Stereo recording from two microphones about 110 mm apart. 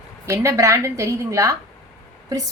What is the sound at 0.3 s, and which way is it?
A woman's voice, 30° right (ahead or behind).